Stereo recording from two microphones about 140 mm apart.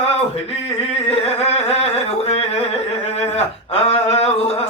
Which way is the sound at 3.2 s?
45° left (ahead or behind).